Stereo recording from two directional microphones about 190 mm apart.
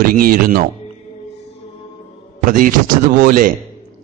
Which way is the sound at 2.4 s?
45° right (ahead or behind).